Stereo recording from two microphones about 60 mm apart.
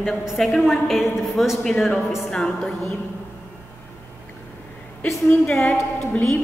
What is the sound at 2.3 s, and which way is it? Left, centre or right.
Music, centre.